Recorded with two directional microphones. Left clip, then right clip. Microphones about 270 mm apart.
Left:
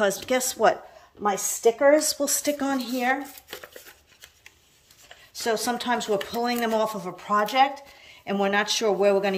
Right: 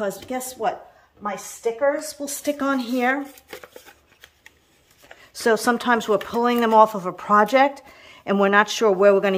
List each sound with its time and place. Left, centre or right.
0.0 s speech: centre
1.2 s a woman's voice: left
2.2 s speech: centre
5.3 s speech: centre